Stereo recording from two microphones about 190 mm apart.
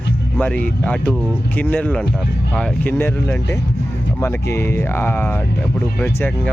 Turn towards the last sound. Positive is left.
turn(degrees=10)  # may be behind; listen again after turning